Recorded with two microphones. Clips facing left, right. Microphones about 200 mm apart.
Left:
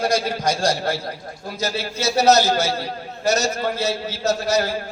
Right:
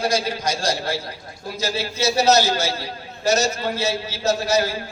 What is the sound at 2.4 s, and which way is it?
A man's voice, 55° left (ahead or behind).